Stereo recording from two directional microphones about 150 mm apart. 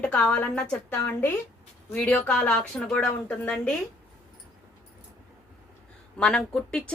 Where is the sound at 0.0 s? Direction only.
5° left (ahead or behind).